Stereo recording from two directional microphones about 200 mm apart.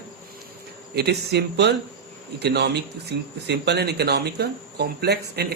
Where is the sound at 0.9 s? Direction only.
55° right (ahead or behind).